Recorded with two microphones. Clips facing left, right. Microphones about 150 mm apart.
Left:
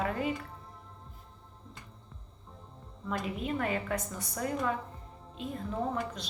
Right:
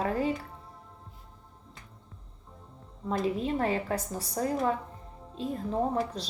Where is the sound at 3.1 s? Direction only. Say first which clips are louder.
Right 5 dB; 30° right (ahead or behind).